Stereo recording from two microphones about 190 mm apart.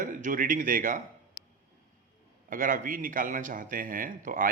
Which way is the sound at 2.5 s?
45° right (ahead or behind).